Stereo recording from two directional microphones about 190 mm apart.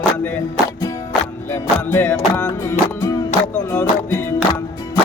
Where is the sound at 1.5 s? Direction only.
10° left (ahead or behind).